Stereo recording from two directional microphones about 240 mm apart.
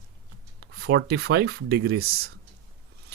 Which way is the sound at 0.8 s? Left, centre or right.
Right.